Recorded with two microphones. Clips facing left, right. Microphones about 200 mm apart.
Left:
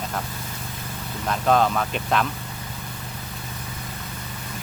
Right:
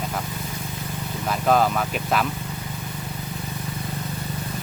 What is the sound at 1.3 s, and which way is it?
Speech, 5° right (ahead or behind).